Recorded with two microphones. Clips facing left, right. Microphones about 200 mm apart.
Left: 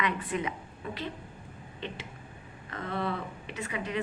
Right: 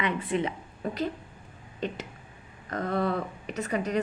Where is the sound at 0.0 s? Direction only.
25° right (ahead or behind).